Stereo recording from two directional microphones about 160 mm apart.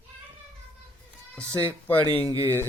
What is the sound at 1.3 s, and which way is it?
Speech, 10° left (ahead or behind).